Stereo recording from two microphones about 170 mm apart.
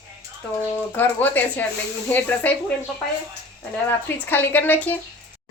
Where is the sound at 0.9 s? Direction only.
10° left (ahead or behind).